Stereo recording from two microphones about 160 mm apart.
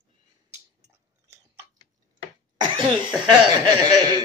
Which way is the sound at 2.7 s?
30° right (ahead or behind).